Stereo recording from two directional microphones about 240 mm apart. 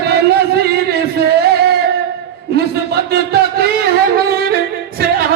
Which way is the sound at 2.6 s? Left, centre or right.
Right.